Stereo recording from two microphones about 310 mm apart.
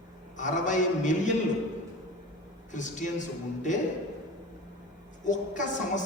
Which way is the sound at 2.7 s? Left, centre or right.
Left.